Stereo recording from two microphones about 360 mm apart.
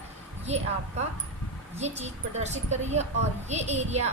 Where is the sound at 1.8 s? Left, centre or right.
Centre.